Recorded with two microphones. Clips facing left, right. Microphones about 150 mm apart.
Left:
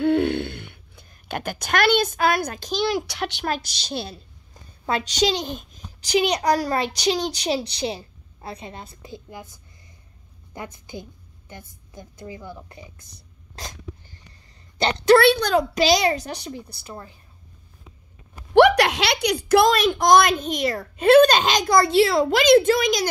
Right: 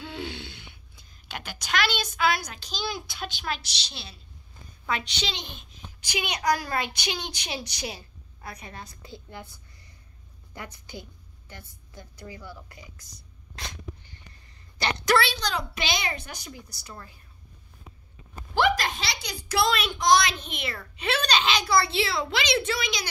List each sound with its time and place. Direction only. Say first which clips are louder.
0.0 s a sound: left 16 dB; 60° left (ahead or behind)
2.8 s speech: left 9 dB; 75° left (ahead or behind)
3.4 s a woman's voice: left 7 dB; 45° left (ahead or behind)
4.8 s a child's voice: left 9 dB; 35° left (ahead or behind); by 9.5 s 15° left (ahead or behind)
10.5 s a woman's voice: left 5 dB; 20° left (ahead or behind)
13.6 s sneeze: left 3 dB; 40° left (ahead or behind)
14.8 s a woman's voice: left 9 dB; 30° left (ahead or behind)
15.1 s a woman's voice: left 11 dB; 55° left (ahead or behind)
15.7 s a child's voice: left 12 dB; 35° left (ahead or behind)
18.5 s a woman's voice: left 10 dB; 70° left (ahead or behind); by 23.0 s 45° left (ahead or behind)